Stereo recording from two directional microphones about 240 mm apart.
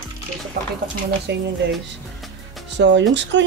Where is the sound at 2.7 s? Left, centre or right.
Right.